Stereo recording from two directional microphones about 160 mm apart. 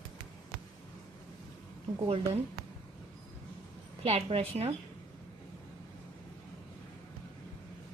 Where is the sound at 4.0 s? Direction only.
40° right (ahead or behind).